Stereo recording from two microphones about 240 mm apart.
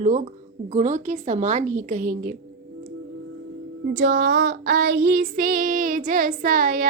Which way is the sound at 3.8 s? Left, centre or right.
Right.